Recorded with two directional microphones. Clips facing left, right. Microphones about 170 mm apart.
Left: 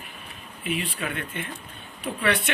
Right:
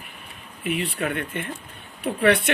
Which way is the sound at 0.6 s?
65° right (ahead or behind).